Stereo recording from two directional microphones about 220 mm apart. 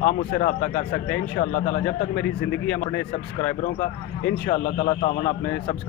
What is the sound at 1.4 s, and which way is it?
Speech, 25° left (ahead or behind).